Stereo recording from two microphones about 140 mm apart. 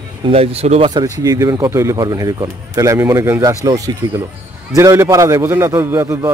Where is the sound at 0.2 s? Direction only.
45° right (ahead or behind).